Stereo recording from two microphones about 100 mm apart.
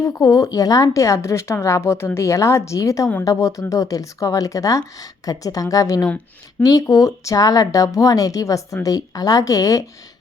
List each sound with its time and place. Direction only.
0.0 s a woman's voice: 35° left (ahead or behind)